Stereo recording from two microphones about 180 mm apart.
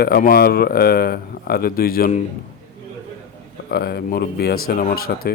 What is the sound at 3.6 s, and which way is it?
Speech, 60° left (ahead or behind).